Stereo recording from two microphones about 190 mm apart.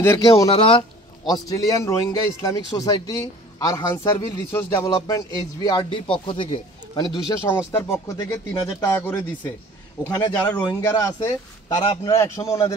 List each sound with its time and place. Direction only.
0.0 s a man's voice: 15° left (ahead or behind)
0.5 s a man's voice: 30° left (ahead or behind)